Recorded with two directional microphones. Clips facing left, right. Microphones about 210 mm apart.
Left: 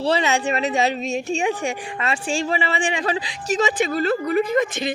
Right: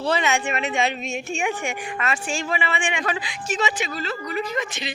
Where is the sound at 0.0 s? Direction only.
35° left (ahead or behind).